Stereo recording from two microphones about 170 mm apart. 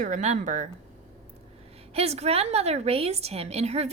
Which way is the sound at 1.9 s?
40° right (ahead or behind).